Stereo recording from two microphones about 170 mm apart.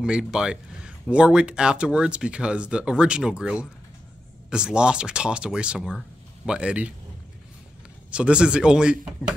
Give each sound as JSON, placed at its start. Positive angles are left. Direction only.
{"t": 0.0, "sound": "speech", "side_deg": -5}
{"t": 8.1, "sound": "speech", "side_deg": -5}